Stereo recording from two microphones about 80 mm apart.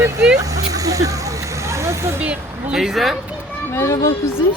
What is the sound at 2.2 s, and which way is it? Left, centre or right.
Speech, centre.